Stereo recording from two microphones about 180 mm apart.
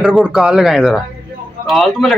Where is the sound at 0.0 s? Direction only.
5° right (ahead or behind).